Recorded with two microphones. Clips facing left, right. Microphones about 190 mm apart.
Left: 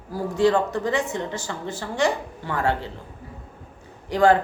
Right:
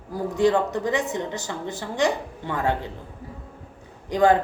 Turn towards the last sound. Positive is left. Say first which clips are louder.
# left 1 dB
turn(degrees=-15)  # may be behind; listen again after turning